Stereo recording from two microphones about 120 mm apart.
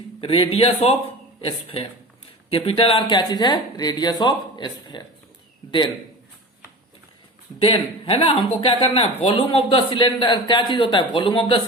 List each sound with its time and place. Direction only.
0.2 s speech: 50° left (ahead or behind)
7.6 s speech: 50° left (ahead or behind)